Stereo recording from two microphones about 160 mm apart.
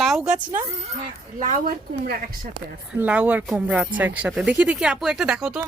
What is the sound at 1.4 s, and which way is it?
Speech, 45° right (ahead or behind).